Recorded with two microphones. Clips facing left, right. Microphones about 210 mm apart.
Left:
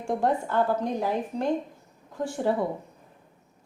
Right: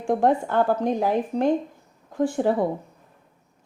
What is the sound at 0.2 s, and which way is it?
Speech, 50° right (ahead or behind).